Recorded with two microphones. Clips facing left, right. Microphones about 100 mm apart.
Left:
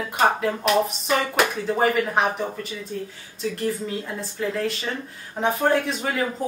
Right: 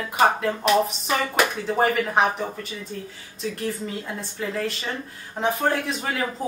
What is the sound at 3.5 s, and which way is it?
Speech, centre (ahead or behind).